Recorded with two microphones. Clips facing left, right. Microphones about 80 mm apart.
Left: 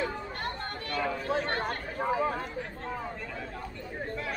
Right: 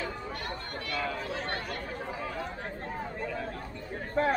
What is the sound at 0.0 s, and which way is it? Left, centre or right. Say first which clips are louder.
Chatter: left 3 dB; left.